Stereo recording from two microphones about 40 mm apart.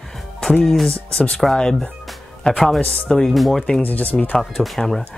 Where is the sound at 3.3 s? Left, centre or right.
Centre.